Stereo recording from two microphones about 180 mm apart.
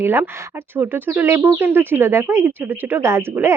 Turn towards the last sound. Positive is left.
turn(degrees=-15)  # may be behind; listen again after turning